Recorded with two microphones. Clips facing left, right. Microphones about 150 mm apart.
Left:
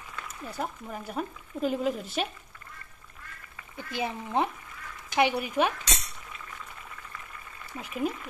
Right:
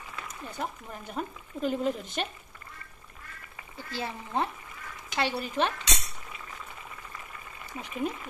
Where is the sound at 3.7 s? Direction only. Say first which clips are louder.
Left 3 dB; 15° left (ahead or behind).